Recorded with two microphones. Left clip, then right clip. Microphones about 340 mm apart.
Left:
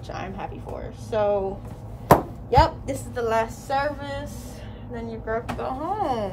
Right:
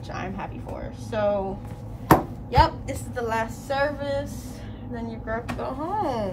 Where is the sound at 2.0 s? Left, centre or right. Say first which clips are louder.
Left 1 dB; centre.